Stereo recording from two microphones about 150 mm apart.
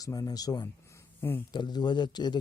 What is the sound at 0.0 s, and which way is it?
Speech, 25° left (ahead or behind).